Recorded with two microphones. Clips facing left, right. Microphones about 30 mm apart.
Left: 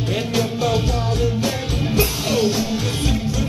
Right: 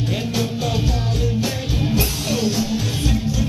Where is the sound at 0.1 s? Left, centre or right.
Centre.